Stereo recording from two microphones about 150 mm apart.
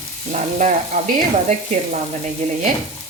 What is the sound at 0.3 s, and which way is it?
Speech, 55° right (ahead or behind).